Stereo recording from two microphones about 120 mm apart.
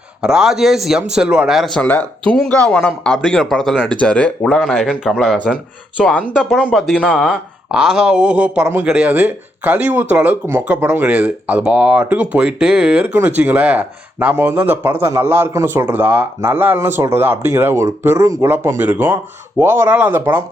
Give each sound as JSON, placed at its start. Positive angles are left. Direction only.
{"t": 0.2, "sound": "speech", "side_deg": -5}
{"t": 1.8, "sound": "speech", "side_deg": 15}
{"t": 4.4, "sound": "speech", "side_deg": 0}
{"t": 6.1, "sound": "speech", "side_deg": 10}
{"t": 6.3, "sound": "speech", "side_deg": -5}